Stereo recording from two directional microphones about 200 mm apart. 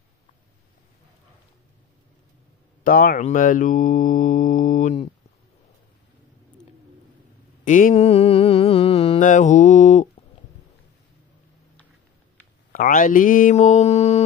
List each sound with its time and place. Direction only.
2.8 s speech: 45° left (ahead or behind)
7.6 s mantra: 40° left (ahead or behind)
9.2 s mantra: 40° left (ahead or behind)
12.7 s speech: 40° left (ahead or behind)